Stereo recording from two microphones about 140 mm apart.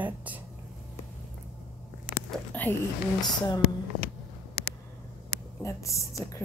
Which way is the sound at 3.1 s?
25° left (ahead or behind).